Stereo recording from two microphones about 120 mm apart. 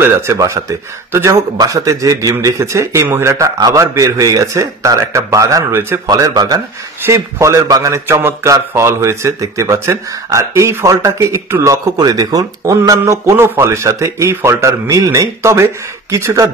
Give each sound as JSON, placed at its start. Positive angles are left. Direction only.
{"t": 0.0, "sound": "a man's voice", "side_deg": -25}
{"t": 6.0, "sound": "a man's voice", "side_deg": -30}